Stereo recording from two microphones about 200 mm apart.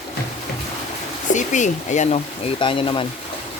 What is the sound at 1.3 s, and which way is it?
Speech, 40° left (ahead or behind).